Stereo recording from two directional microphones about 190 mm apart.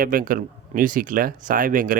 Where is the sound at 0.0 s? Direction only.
50° right (ahead or behind).